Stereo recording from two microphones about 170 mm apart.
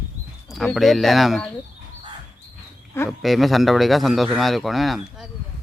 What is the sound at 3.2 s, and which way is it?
A man's voice, centre (ahead or behind).